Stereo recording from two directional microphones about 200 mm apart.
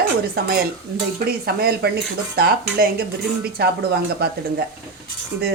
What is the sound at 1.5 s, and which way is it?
Speech, 50° right (ahead or behind).